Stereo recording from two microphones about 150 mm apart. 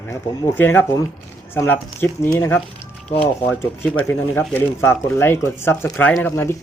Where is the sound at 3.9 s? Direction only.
15° left (ahead or behind).